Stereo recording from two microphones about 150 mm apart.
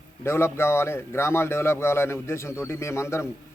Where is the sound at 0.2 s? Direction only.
15° left (ahead or behind).